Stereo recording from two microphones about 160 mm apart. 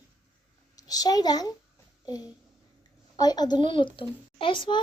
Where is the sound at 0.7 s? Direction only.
25° left (ahead or behind).